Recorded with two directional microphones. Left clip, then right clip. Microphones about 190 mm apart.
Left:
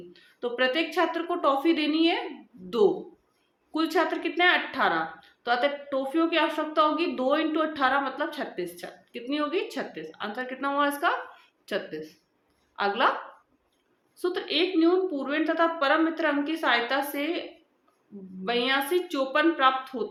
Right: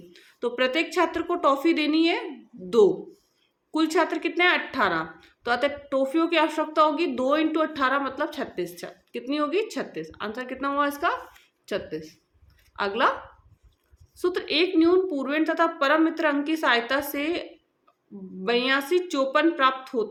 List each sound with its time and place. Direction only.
0.1 s a woman's voice: 40° right (ahead or behind)
3.7 s a woman's voice: 40° right (ahead or behind)
14.2 s a woman's voice: 40° right (ahead or behind)
18.4 s a woman's voice: 40° right (ahead or behind)